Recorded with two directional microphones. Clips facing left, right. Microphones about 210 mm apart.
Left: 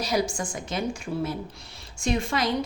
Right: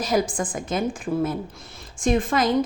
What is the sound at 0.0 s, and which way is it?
A woman's voice, 50° right (ahead or behind).